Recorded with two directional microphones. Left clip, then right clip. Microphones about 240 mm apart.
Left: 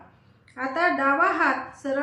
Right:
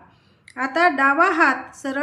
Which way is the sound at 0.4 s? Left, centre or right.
Right.